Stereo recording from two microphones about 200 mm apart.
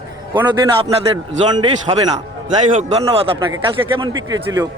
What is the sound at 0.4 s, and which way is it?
Speech, 25° right (ahead or behind).